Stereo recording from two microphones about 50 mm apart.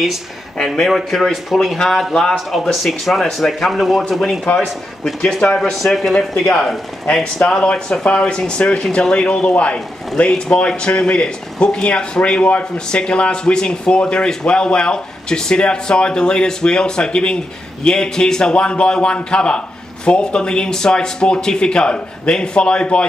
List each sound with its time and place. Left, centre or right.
0.7 s speech: centre
2.3 s a man's voice: centre